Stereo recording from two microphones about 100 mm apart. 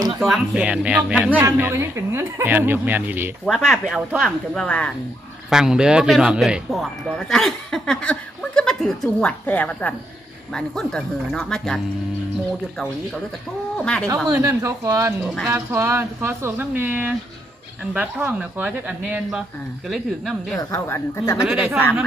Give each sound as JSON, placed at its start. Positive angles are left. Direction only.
{"t": 0.2, "sound": "speech", "side_deg": 0}
{"t": 0.5, "sound": "speech", "side_deg": -10}
{"t": 3.4, "sound": "speech", "side_deg": 5}
{"t": 5.5, "sound": "speech", "side_deg": -5}
{"t": 9.5, "sound": "speech", "side_deg": 15}
{"t": 13.7, "sound": "speech", "side_deg": 10}
{"t": 14.3, "sound": "a woman's voice", "side_deg": -35}
{"t": 19.9, "sound": "speech", "side_deg": 0}
{"t": 20.6, "sound": "speech", "side_deg": 30}
{"t": 21.4, "sound": "speech", "side_deg": -10}